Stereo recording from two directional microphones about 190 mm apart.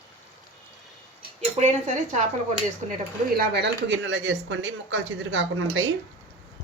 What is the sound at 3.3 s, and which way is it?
Speech, 55° right (ahead or behind).